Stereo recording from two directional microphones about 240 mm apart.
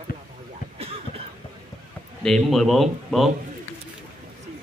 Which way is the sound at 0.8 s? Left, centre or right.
Right.